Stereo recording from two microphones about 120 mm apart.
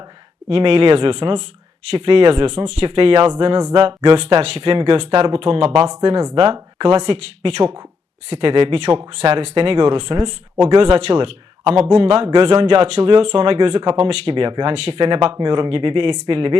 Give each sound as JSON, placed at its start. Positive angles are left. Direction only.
{"t": 0.4, "sound": "speech", "side_deg": -50}
{"t": 6.0, "sound": "speech", "side_deg": -50}
{"t": 12.6, "sound": "speech", "side_deg": -50}